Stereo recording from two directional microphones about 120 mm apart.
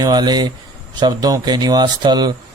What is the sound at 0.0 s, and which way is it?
A man's voice, 35° right (ahead or behind).